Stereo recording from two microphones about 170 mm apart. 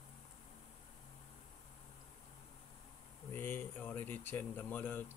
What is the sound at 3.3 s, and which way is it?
Speech, 10° left (ahead or behind).